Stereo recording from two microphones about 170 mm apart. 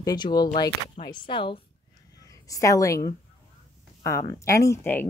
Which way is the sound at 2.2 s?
20° left (ahead or behind).